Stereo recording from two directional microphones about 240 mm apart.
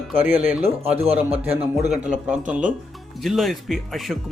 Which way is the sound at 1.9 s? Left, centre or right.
Centre.